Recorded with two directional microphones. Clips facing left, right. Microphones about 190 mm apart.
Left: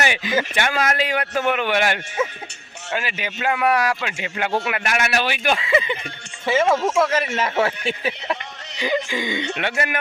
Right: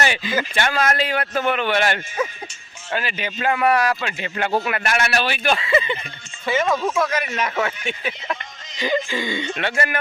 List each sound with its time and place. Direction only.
0.0 s a man's voice: 15° left (ahead or behind)
6.4 s speech: 25° left (ahead or behind)
9.0 s a man's voice: 15° left (ahead or behind)